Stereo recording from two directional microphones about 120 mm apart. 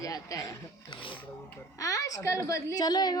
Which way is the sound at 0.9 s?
45° left (ahead or behind).